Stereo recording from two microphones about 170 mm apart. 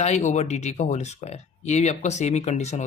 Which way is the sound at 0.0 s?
40° left (ahead or behind).